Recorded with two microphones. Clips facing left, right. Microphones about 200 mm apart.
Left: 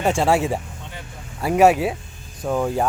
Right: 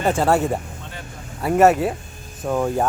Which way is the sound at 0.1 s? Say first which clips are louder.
Right 1 dB; centre (ahead or behind).